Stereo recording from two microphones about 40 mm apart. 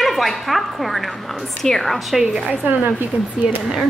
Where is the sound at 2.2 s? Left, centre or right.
Centre.